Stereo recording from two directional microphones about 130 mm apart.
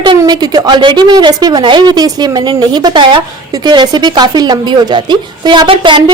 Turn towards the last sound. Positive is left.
turn(degrees=-35)  # may be behind; listen again after turning